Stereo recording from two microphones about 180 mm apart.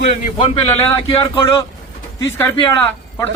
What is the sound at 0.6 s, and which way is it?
A man's voice, 20° left (ahead or behind).